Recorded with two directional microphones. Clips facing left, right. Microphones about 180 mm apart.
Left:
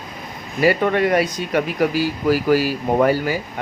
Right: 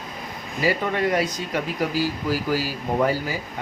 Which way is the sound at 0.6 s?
65° left (ahead or behind).